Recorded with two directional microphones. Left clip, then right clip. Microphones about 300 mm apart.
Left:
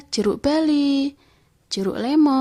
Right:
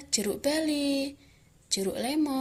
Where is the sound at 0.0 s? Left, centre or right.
Left.